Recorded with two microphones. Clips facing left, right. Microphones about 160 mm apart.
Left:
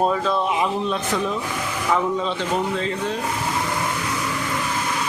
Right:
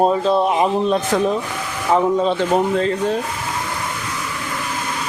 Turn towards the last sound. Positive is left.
turn(degrees=-45)  # may be behind; listen again after turning